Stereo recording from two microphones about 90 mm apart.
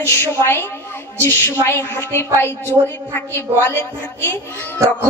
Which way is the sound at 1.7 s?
30° left (ahead or behind).